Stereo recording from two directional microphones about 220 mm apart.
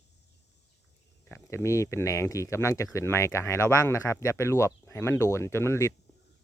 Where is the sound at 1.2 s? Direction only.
10° left (ahead or behind).